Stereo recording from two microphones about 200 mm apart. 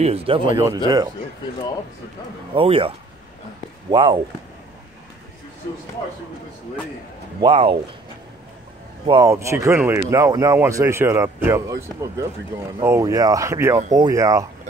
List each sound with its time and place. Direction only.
0.0 s speech: 30° right (ahead or behind)
0.6 s speech: 15° right (ahead or behind)
2.5 s speech: 25° right (ahead or behind)
3.9 s speech: 20° right (ahead or behind)
7.3 s speech: 25° right (ahead or behind)
9.0 s speech: 20° right (ahead or behind)